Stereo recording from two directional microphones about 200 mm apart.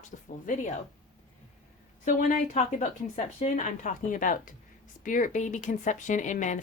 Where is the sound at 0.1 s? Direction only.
40° left (ahead or behind).